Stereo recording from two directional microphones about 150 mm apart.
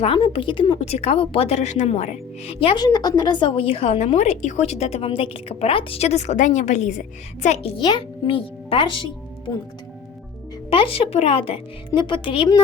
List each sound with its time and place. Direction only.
0.0 s a woman's voice: 40° left (ahead or behind)
2.5 s a woman's voice: 40° left (ahead or behind)
7.8 s a child's voice: 30° left (ahead or behind)
10.7 s a child's voice: 40° left (ahead or behind)